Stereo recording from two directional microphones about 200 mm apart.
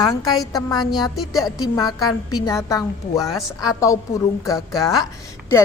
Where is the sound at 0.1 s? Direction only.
20° left (ahead or behind).